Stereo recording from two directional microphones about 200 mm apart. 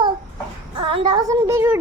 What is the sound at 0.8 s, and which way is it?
A woman's voice, 25° right (ahead or behind).